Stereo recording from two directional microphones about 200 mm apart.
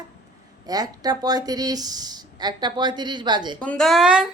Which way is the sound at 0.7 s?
20° right (ahead or behind).